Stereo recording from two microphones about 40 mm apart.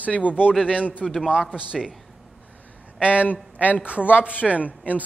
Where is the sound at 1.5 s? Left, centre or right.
Centre.